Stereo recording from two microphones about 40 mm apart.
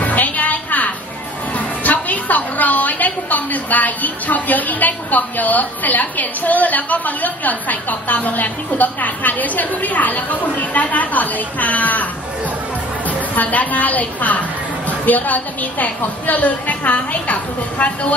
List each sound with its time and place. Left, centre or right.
0.0 s a sound: left
1.5 s a woman's voice: left
13.3 s a woman's voice: left